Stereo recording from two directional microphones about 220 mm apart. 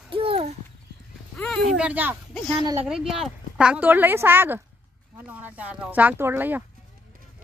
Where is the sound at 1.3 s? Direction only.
5° left (ahead or behind).